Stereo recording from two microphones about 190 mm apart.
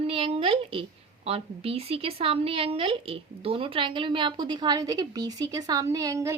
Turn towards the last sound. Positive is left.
turn(degrees=-15)  # may be behind; listen again after turning